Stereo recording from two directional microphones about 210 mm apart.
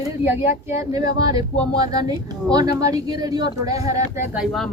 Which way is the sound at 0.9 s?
20° right (ahead or behind).